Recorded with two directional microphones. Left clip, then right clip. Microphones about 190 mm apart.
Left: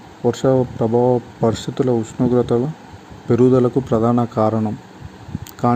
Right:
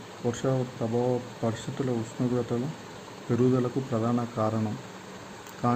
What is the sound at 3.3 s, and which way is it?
Speech, 40° left (ahead or behind).